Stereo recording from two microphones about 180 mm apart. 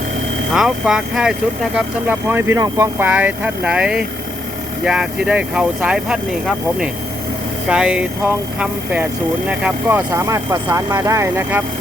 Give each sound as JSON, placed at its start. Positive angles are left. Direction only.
{"t": 0.5, "sound": "speech", "side_deg": -5}
{"t": 7.7, "sound": "speech", "side_deg": -5}